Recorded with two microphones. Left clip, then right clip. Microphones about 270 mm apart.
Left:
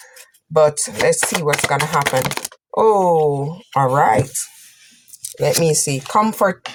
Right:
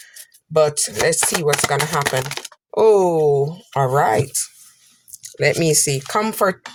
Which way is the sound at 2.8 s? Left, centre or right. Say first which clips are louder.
Even; right.